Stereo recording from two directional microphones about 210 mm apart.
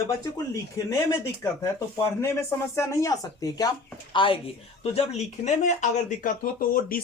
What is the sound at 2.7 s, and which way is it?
Speech, 15° left (ahead or behind).